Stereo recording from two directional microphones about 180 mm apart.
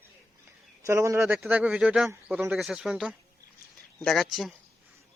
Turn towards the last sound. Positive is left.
turn(degrees=0)  # may be behind; listen again after turning